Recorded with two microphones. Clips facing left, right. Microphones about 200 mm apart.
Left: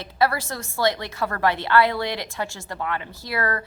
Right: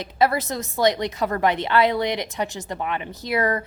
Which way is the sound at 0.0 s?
20° right (ahead or behind).